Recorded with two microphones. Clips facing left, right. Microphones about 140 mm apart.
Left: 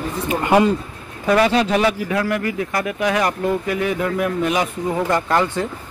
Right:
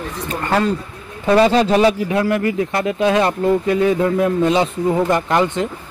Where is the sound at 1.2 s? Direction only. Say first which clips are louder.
Right 3 dB; 30° right (ahead or behind).